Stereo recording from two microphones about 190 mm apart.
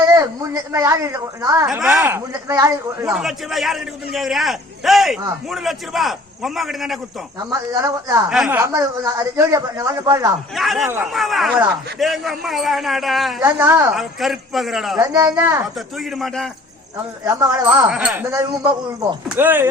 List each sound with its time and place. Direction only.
0.0 s a man's voice: 20° right (ahead or behind)
1.6 s a man's voice: 5° right (ahead or behind)
3.1 s a man's voice: centre (ahead or behind)
7.7 s a man's voice: 15° right (ahead or behind)
10.5 s a man's voice: centre (ahead or behind)
13.4 s a man's voice: 15° right (ahead or behind)
13.9 s a man's voice: centre (ahead or behind)
17.2 s a man's voice: 15° right (ahead or behind)